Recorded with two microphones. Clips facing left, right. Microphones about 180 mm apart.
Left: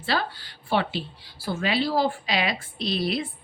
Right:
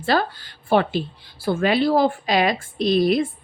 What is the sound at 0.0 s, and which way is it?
Speech, 45° right (ahead or behind).